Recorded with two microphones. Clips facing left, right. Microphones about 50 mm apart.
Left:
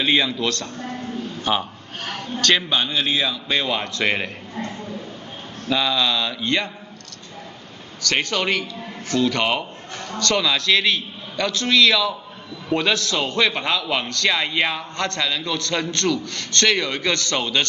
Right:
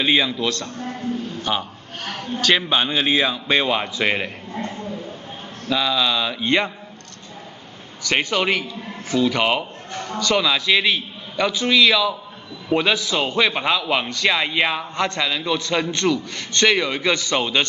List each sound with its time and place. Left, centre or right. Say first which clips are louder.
0.0 s a man's voice: right 1 dB; centre
1.4 s a man's voice: left 2 dB; centre
2.4 s a man's voice: right 1 dB; centre
2.8 s a man's voice: right 3 dB; right
5.7 s a man's voice: even; centre
6.4 s a man's voice: right 5 dB; right
8.0 s a man's voice: right 2 dB; centre